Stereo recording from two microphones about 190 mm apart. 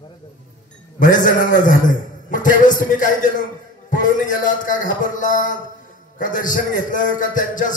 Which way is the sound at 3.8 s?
45° left (ahead or behind).